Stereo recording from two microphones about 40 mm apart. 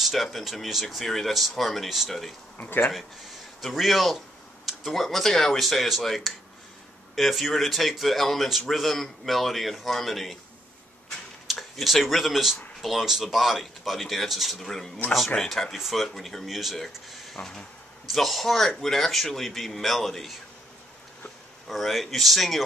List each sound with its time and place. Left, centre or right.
0.0 s speech: centre
3.6 s speech: centre
11.5 s speech: centre
16.7 s speech: centre
17.4 s speech: centre
18.0 s speech: centre
21.6 s speech: centre